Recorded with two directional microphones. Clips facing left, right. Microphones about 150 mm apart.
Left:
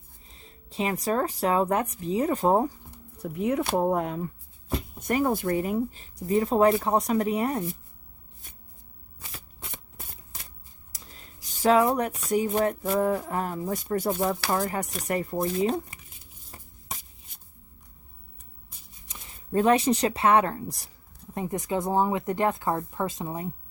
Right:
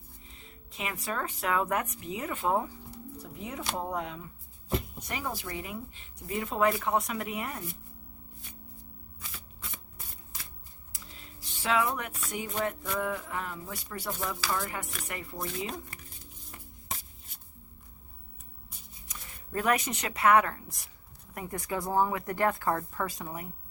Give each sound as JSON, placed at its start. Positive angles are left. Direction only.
{"t": 0.3, "sound": "a woman's voice", "side_deg": 35}
{"t": 2.9, "sound": "speech", "side_deg": 60}
{"t": 10.9, "sound": "a sound", "side_deg": 40}
{"t": 11.4, "sound": "speech", "side_deg": 40}
{"t": 16.5, "sound": "a sound", "side_deg": 30}
{"t": 19.0, "sound": "speech", "side_deg": 25}
{"t": 21.3, "sound": "speech", "side_deg": 20}